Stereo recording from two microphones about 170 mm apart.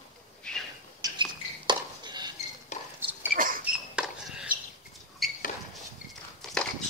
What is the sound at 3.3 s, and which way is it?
Cricket, 55° right (ahead or behind).